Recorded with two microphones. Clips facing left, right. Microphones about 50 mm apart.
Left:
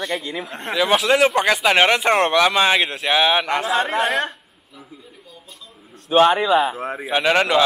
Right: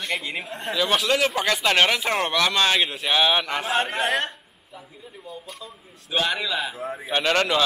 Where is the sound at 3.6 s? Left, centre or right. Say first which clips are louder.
Left 4 dB; left.